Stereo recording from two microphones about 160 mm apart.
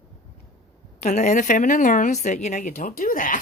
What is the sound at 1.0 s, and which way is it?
Speech, 45° left (ahead or behind).